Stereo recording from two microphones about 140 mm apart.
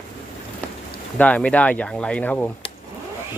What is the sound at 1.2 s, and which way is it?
Speech, 5° left (ahead or behind).